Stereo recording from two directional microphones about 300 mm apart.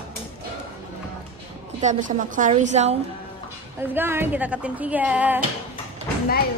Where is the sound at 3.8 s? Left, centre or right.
Centre.